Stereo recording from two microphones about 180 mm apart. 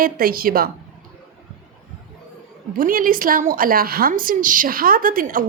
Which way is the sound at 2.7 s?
50° right (ahead or behind).